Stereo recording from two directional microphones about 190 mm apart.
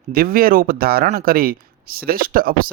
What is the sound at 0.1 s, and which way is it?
Speech, 50° right (ahead or behind).